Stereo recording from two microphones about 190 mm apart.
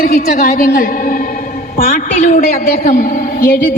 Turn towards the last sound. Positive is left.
turn(degrees=45)  # may be behind; listen again after turning